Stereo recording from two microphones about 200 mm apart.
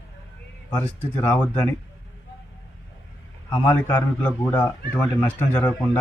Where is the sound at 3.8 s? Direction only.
10° left (ahead or behind).